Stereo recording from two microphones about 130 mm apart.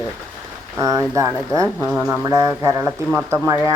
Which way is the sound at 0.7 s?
25° right (ahead or behind).